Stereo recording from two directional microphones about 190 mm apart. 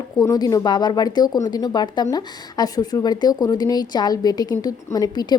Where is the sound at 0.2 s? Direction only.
20° left (ahead or behind).